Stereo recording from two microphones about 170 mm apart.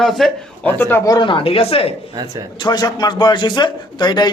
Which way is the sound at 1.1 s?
30° left (ahead or behind).